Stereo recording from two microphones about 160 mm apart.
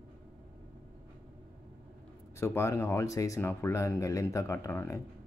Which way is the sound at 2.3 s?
15° left (ahead or behind).